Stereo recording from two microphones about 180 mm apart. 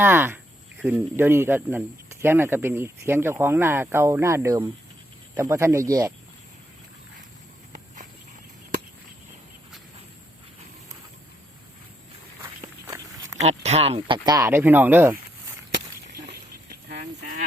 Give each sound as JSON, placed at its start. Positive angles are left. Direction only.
{"t": 0.0, "sound": "speech", "side_deg": -10}
{"t": 13.4, "sound": "speech", "side_deg": -35}
{"t": 14.3, "sound": "speech", "side_deg": -15}